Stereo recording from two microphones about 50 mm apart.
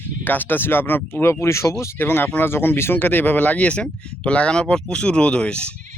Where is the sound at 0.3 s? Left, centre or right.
Left.